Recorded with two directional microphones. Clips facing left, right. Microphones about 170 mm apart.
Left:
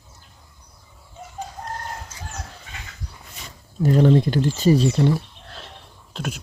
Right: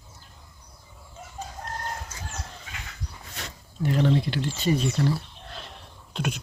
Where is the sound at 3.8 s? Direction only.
40° left (ahead or behind); by 5.1 s 25° left (ahead or behind).